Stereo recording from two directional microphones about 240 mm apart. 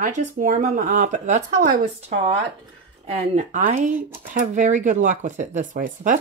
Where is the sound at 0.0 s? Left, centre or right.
Right.